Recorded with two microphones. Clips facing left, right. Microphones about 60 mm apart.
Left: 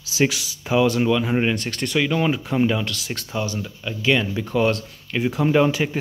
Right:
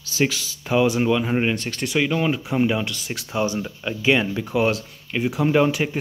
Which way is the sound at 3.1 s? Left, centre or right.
Centre.